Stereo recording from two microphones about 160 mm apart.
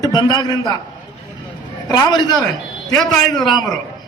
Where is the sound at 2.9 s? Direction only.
Centre (ahead or behind).